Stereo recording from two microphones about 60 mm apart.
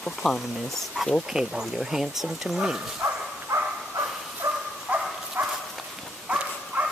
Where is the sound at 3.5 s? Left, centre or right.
Right.